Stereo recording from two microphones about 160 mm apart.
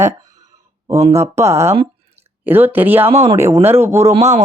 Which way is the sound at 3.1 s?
40° right (ahead or behind).